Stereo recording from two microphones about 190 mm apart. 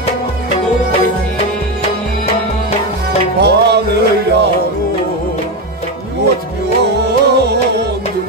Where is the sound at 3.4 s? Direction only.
60° right (ahead or behind).